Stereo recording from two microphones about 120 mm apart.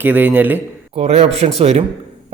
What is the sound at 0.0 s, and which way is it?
Speech, 15° right (ahead or behind).